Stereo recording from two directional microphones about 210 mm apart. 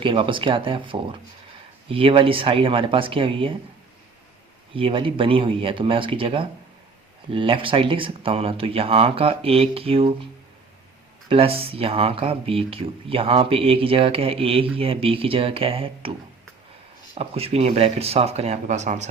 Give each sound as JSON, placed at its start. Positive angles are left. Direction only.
{"t": 0.0, "sound": "speech", "side_deg": -25}
{"t": 4.7, "sound": "speech", "side_deg": -25}
{"t": 11.3, "sound": "speech", "side_deg": -25}
{"t": 17.2, "sound": "speech", "side_deg": -30}